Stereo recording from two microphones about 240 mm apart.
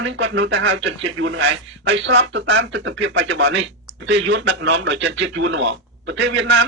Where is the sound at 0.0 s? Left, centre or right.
Right.